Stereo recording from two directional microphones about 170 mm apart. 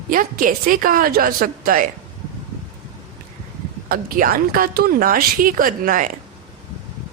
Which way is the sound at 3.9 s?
60° right (ahead or behind).